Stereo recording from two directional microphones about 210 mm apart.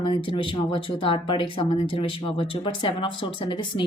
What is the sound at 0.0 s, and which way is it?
Speech, 25° left (ahead or behind).